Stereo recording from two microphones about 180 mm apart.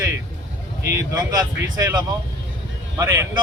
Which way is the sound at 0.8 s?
15° right (ahead or behind).